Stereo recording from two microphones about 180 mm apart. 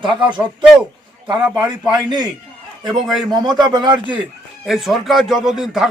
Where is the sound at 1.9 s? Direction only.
25° right (ahead or behind).